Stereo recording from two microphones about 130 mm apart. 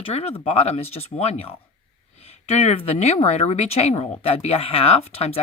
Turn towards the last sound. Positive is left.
turn(degrees=50)  # may be behind; listen again after turning